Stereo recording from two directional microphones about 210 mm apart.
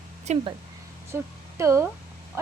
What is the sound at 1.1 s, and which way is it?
Speech, 15° right (ahead or behind).